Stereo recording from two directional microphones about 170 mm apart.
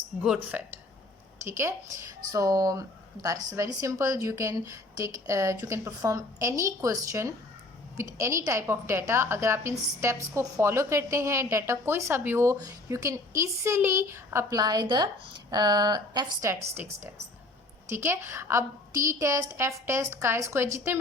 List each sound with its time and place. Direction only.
0.2 s a woman's voice: 10° right (ahead or behind)
17.8 s a woman's voice: 15° right (ahead or behind)